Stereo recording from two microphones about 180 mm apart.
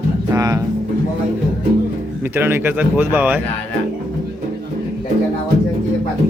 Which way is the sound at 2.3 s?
10° right (ahead or behind).